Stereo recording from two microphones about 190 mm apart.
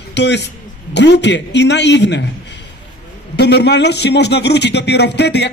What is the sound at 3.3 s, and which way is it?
A man's voice, 60° left (ahead or behind).